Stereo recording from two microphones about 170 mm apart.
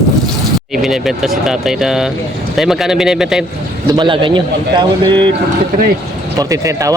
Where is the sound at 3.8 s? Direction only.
30° right (ahead or behind).